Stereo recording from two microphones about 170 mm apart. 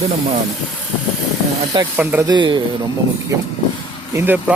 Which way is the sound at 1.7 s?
30° right (ahead or behind).